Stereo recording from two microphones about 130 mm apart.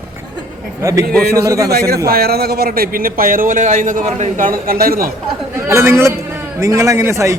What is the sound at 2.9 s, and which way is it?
A man's voice, 90° right.